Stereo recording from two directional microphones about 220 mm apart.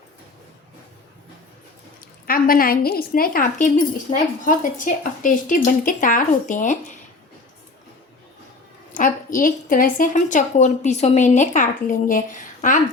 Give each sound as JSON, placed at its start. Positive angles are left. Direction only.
{"t": 2.2, "sound": "a woman's voice", "side_deg": 40}
{"t": 4.1, "sound": "a woman's voice", "side_deg": 30}
{"t": 9.0, "sound": "a woman's voice", "side_deg": 40}